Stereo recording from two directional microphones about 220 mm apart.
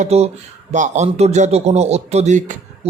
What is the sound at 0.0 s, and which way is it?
A man's voice, 30° right (ahead or behind).